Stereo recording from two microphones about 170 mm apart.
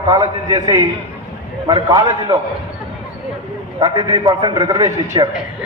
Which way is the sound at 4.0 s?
25° right (ahead or behind).